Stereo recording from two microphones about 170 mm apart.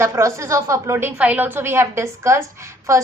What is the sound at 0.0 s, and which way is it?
A woman's voice, 15° right (ahead or behind).